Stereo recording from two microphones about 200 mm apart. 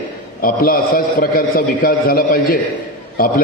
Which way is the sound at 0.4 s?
45° left (ahead or behind).